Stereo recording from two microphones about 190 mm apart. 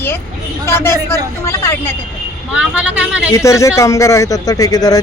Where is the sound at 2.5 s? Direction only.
5° right (ahead or behind).